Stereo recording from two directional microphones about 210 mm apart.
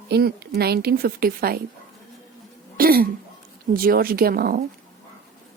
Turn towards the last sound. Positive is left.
turn(degrees=-45)  # may be behind; listen again after turning